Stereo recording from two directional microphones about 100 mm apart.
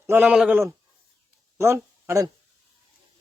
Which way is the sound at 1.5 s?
25° right (ahead or behind).